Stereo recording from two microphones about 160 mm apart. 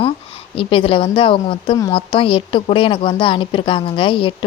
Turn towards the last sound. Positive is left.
turn(degrees=30)  # may be behind; listen again after turning